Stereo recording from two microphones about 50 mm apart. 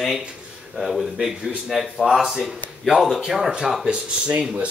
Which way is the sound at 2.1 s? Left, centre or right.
Centre.